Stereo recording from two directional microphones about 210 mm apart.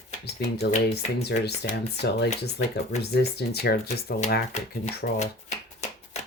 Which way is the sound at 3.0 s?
50° left (ahead or behind).